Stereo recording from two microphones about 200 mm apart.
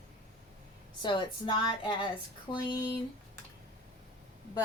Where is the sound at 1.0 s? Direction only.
25° left (ahead or behind).